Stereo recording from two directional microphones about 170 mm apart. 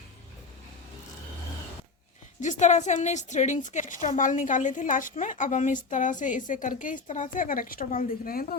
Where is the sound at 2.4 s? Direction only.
45° left (ahead or behind).